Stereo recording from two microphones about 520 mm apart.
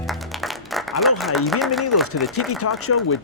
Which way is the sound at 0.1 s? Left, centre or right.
Centre.